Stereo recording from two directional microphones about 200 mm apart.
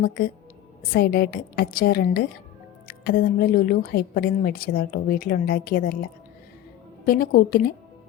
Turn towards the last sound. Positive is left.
turn(degrees=50)  # may be behind; listen again after turning